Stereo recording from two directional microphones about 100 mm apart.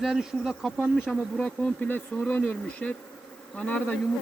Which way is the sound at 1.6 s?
15° left (ahead or behind).